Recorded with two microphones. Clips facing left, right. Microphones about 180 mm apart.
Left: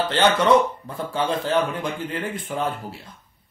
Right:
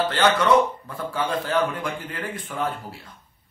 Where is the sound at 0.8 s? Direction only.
25° left (ahead or behind).